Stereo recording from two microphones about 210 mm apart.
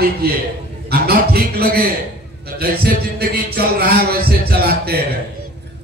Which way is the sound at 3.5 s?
45° right (ahead or behind).